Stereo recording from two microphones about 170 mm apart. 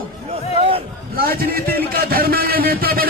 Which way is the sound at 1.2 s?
60° right (ahead or behind).